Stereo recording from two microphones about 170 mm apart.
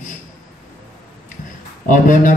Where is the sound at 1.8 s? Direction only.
50° left (ahead or behind).